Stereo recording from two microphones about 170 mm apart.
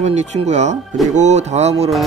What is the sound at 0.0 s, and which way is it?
Speech, 40° right (ahead or behind).